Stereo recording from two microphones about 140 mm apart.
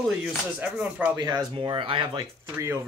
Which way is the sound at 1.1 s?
25° right (ahead or behind).